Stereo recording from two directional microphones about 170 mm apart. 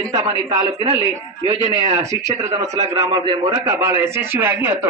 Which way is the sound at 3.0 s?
25° right (ahead or behind).